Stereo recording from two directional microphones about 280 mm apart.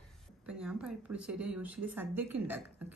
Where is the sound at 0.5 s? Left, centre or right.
Centre.